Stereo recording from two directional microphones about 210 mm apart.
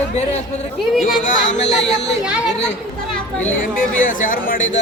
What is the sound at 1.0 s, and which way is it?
Speech, 35° left (ahead or behind).